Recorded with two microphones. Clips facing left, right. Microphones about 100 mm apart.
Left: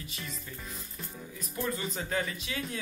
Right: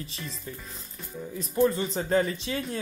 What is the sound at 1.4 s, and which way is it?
Speech, 30° right (ahead or behind).